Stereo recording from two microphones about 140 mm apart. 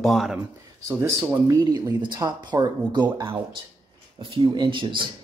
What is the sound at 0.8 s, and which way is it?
Speech, 20° right (ahead or behind).